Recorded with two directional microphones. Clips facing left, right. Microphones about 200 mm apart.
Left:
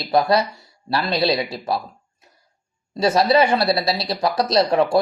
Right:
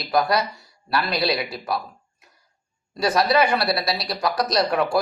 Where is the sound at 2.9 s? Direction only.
25° left (ahead or behind).